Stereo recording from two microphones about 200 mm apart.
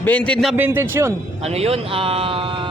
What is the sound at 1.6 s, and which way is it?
Speech, 30° right (ahead or behind).